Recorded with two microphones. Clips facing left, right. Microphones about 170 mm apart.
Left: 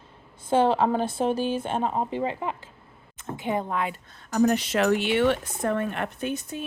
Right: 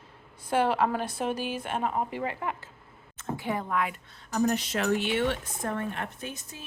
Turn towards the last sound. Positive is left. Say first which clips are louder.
# left 10 dB
turn(degrees=60)  # may be behind; listen again after turning